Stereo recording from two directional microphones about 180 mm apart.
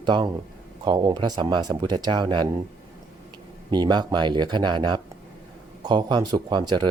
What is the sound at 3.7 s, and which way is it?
Speech, 25° right (ahead or behind).